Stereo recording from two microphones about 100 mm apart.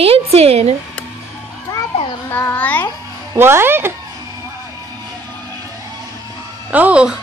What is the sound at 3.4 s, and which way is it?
Speech, 25° right (ahead or behind).